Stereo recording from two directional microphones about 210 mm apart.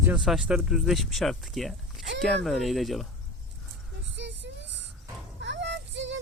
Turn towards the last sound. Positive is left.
turn(degrees=-60)  # may be behind; listen again after turning